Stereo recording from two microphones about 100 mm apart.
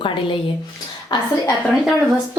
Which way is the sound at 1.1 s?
45° left (ahead or behind).